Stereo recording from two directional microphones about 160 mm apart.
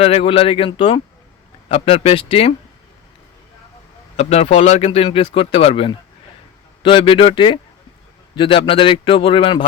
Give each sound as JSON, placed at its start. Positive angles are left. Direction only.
{"t": 0.0, "sound": "speech", "side_deg": 35}
{"t": 4.2, "sound": "speech", "side_deg": 40}